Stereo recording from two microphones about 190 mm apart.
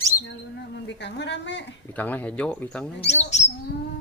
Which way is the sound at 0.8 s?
65° left (ahead or behind).